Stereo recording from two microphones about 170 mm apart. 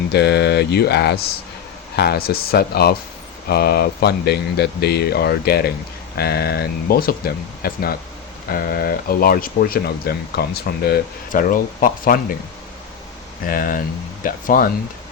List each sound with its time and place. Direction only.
0.1 s speech: 80° left; by 12.2 s 55° left (ahead or behind)
13.5 s speech: 55° left (ahead or behind)